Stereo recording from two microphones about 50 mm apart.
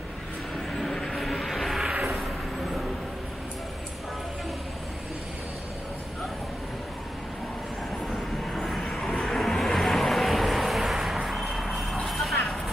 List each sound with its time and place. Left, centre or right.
0.7 s vehicle: centre
8.5 s vehicle: centre